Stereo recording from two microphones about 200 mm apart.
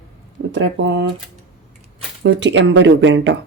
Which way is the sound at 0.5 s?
65° right (ahead or behind).